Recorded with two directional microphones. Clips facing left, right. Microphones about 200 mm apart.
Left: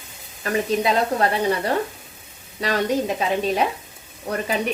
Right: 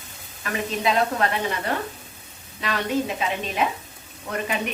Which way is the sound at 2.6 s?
40° left (ahead or behind).